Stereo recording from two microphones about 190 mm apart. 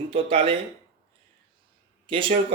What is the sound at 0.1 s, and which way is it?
Speech, 30° right (ahead or behind).